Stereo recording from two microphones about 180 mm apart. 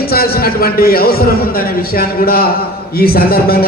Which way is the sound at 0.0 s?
55° left (ahead or behind).